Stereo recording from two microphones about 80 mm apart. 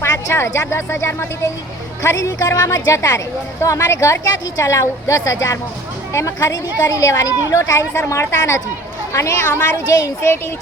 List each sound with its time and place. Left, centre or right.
0.0 s a woman's voice: left
9.9 s a woman's voice: left